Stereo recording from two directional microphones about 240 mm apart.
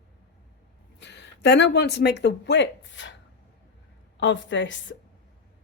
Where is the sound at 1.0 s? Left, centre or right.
Left.